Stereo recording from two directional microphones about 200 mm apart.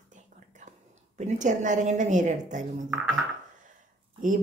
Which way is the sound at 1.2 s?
40° right (ahead or behind).